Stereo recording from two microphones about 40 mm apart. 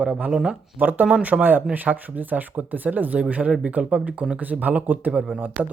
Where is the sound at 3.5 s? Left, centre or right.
Right.